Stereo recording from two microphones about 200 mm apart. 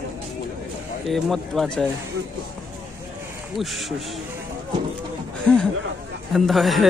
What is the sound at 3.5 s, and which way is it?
Speech, centre (ahead or behind).